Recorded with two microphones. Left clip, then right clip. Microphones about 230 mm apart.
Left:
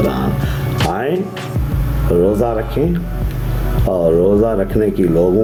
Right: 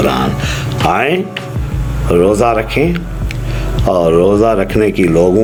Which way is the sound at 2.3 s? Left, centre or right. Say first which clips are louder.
Right 5 dB; centre.